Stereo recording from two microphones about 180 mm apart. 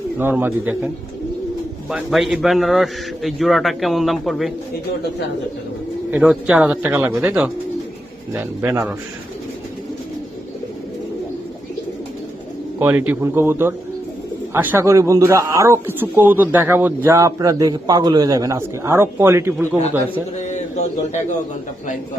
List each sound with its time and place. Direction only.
0.2 s a man's voice: 10° right (ahead or behind)
1.9 s a man's voice: 5° right (ahead or behind)
6.1 s a man's voice: 5° right (ahead or behind)
12.8 s a man's voice: 10° right (ahead or behind)